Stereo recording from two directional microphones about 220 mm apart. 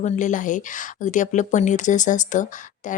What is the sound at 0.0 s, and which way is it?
Speech, 35° left (ahead or behind).